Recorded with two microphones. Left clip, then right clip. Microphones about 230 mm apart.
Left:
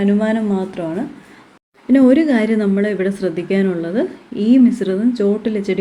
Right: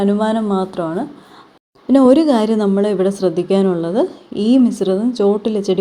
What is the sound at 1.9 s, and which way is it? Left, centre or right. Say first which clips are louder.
A woman's voice: right 2 dB; centre.